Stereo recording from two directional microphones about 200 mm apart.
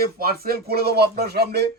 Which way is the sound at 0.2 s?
50° right (ahead or behind).